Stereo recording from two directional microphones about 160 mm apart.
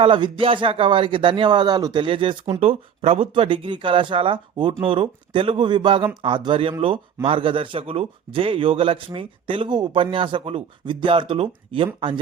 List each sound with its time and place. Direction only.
0.0 s a man's voice: 35° right (ahead or behind)